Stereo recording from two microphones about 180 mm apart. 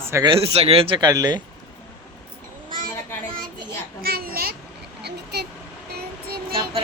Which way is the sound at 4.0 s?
55° right (ahead or behind).